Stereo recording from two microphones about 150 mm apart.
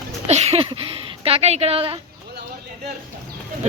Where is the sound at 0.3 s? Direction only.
45° right (ahead or behind).